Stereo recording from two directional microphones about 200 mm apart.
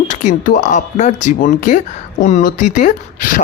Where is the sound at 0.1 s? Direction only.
40° left (ahead or behind).